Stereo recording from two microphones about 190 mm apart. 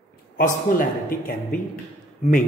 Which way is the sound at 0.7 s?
45° left (ahead or behind).